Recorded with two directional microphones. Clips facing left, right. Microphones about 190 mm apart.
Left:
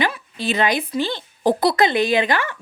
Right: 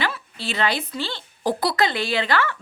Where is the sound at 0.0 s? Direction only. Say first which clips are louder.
Left 5 dB; 15° left (ahead or behind).